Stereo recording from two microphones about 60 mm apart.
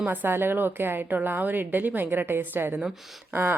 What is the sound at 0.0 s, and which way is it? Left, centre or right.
A woman's voice, right.